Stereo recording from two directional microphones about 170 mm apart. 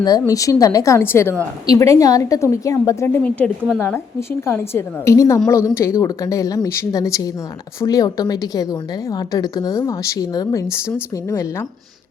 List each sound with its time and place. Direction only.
0.0 s a woman's voice: 20° left (ahead or behind)